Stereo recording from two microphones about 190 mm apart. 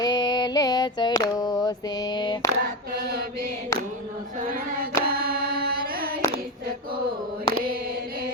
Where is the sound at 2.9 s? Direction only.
50° right (ahead or behind).